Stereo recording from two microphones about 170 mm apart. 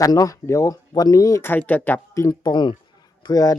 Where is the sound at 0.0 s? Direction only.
20° left (ahead or behind).